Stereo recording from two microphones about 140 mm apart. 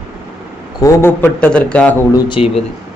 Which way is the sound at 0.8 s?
25° left (ahead or behind).